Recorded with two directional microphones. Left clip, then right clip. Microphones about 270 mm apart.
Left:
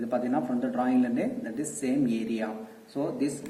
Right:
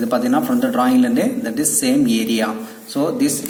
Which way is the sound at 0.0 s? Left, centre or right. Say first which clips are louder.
Right 11 dB; right.